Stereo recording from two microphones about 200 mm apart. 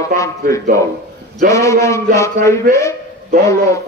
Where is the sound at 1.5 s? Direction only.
15° left (ahead or behind).